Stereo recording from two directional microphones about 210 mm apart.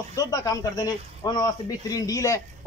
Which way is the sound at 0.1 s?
15° left (ahead or behind).